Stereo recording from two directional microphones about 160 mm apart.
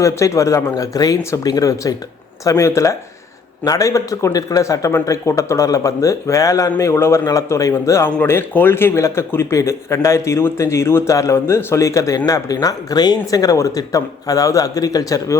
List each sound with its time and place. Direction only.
0.0 s speech: 20° left (ahead or behind)